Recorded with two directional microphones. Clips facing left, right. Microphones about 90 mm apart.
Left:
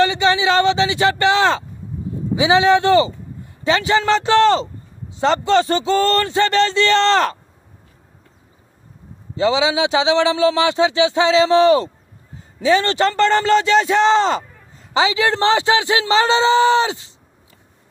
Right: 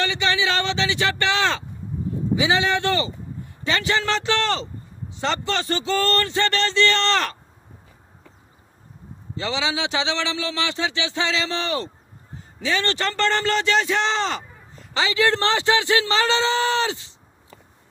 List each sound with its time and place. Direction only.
0.0 s a sound: 30° left (ahead or behind)
2.3 s a man's voice: 20° left (ahead or behind)
9.4 s a man's voice: 20° left (ahead or behind)
15.0 s a man's voice: 20° left (ahead or behind)